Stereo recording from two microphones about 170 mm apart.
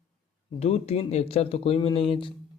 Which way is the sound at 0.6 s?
40° left (ahead or behind).